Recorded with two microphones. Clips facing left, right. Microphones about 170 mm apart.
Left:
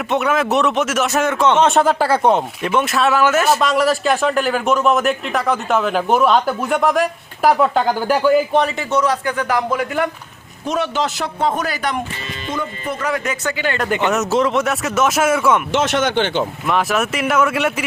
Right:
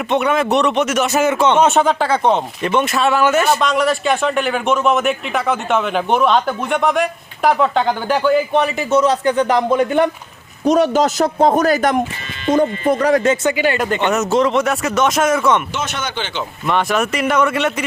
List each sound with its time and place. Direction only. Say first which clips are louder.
0.1 s speech: right 1 dB; centre (ahead or behind)
8.9 s a man's voice: right 4 dB; 25° right (ahead or behind)
10.6 s a man's voice: right 7 dB; 40° right (ahead or behind)
13.4 s speech: right 4 dB; 15° right (ahead or behind)
13.9 s speech: left 2 dB; centre (ahead or behind)
15.7 s speech: left 7 dB; 85° left; by 16.4 s 60° left (ahead or behind)
16.6 s speech: right 4 dB; centre (ahead or behind)